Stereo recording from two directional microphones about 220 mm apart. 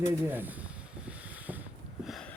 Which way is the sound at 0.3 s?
10° right (ahead or behind).